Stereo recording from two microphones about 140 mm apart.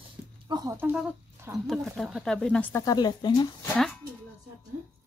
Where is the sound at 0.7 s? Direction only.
15° right (ahead or behind).